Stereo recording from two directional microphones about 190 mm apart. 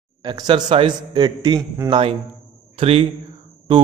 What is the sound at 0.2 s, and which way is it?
A man's voice, 25° right (ahead or behind).